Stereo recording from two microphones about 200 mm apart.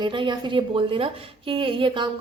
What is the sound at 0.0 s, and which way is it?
A woman's voice, 25° right (ahead or behind).